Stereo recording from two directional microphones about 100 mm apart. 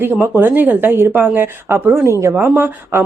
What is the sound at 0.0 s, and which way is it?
Speech, 20° right (ahead or behind).